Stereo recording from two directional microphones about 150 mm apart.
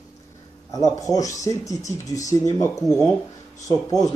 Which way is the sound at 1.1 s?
20° left (ahead or behind).